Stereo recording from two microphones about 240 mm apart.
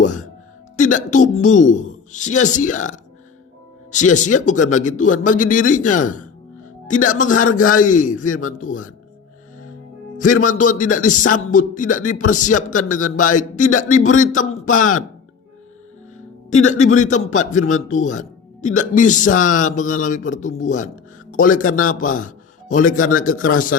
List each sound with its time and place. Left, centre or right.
0.0 s a woman's voice: left
10.4 s a woman's voice: left
16.5 s a woman's voice: left